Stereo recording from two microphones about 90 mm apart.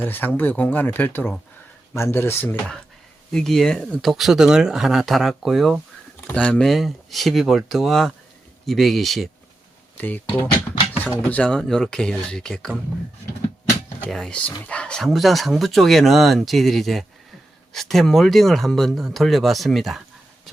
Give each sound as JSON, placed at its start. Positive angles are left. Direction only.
{"t": 0.0, "sound": "speech", "side_deg": 20}
{"t": 3.3, "sound": "speech", "side_deg": 5}
{"t": 6.3, "sound": "speech", "side_deg": 10}
{"t": 10.0, "sound": "speech", "side_deg": 20}
{"t": 14.1, "sound": "speech", "side_deg": 0}